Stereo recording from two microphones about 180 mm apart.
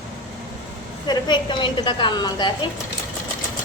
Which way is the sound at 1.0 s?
25° left (ahead or behind).